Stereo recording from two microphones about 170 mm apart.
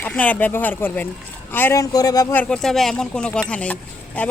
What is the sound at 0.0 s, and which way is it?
Speech, 10° left (ahead or behind).